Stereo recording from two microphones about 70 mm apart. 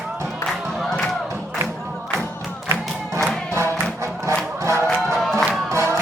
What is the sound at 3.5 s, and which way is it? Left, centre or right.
Music, right.